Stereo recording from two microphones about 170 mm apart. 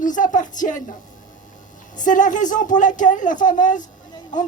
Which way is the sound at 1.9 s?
50° left (ahead or behind).